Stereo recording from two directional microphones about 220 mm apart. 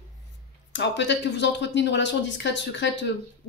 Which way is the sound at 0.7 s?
55° left (ahead or behind).